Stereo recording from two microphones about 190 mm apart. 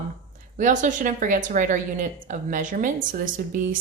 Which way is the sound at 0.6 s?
45° right (ahead or behind).